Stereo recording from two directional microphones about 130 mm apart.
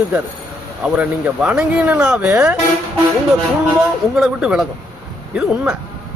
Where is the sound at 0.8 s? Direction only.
10° right (ahead or behind).